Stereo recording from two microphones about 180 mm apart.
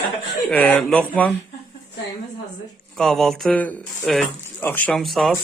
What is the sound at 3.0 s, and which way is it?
A man's voice, centre (ahead or behind).